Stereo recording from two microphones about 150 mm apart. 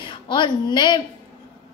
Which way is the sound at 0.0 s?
30° left (ahead or behind).